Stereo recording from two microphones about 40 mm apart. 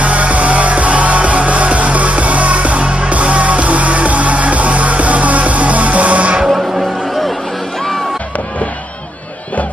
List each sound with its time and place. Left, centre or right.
0.0 s music: right
6.5 s music: centre